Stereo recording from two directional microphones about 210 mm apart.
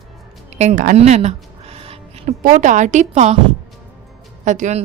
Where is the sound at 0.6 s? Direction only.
35° right (ahead or behind).